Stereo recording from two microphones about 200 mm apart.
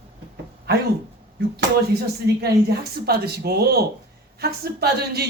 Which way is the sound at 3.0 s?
50° right (ahead or behind).